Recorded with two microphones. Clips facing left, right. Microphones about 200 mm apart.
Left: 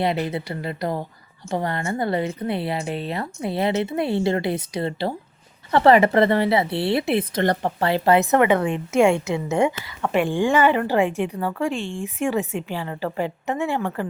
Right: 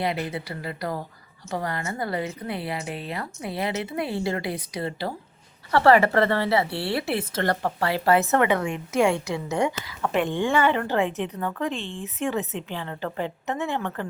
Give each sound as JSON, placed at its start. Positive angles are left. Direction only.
{"t": 0.0, "sound": "a woman's voice", "side_deg": 25}
{"t": 8.5, "sound": "a woman's voice", "side_deg": 30}
{"t": 9.8, "sound": "speech", "side_deg": 5}